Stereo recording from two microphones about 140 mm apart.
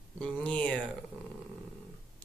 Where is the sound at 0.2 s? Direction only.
10° left (ahead or behind).